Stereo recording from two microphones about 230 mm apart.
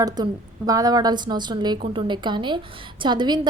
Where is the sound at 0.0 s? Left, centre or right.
Centre.